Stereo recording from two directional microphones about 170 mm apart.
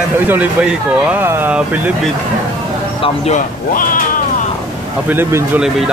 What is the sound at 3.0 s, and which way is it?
Speech, 40° left (ahead or behind).